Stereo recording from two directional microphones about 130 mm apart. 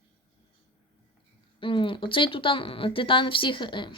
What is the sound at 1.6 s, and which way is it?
Speech, 40° left (ahead or behind).